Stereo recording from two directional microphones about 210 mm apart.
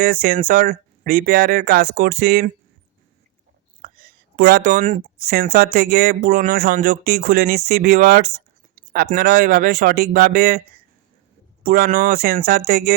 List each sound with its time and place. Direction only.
0.0 s speech: 45° right (ahead or behind)
3.8 s speech: 40° right (ahead or behind)
11.6 s speech: 45° right (ahead or behind)